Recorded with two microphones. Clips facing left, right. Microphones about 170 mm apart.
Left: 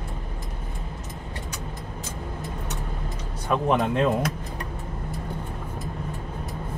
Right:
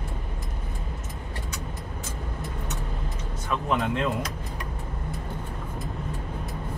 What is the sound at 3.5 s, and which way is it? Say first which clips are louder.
Speech: left 4 dB; 45° left (ahead or behind).